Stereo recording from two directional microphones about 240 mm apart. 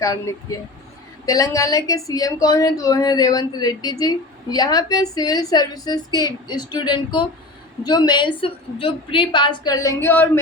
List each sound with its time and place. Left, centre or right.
0.0 s a woman's voice: centre